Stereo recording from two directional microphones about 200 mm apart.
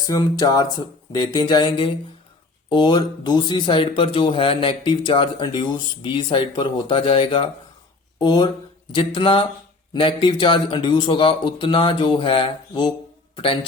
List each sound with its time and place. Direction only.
0.1 s speech: 20° left (ahead or behind)